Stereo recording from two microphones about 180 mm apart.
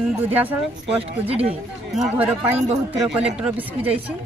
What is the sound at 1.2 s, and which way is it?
Speech, 35° right (ahead or behind).